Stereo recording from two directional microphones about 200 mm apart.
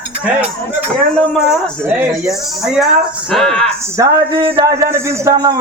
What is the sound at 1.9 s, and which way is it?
Speech, 5° right (ahead or behind).